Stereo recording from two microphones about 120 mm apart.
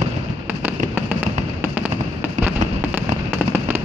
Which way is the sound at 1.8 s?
15° right (ahead or behind).